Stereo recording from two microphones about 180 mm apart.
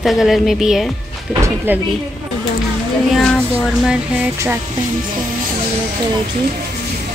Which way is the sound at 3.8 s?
10° right (ahead or behind).